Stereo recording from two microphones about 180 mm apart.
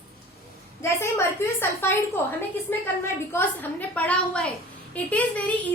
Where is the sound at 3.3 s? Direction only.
10° left (ahead or behind).